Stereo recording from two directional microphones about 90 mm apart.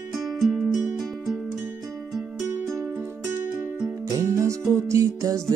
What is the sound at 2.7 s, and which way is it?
Music, 30° right (ahead or behind).